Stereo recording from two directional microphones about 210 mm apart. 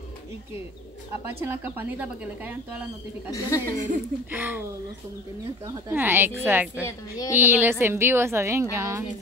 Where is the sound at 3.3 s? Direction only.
15° left (ahead or behind).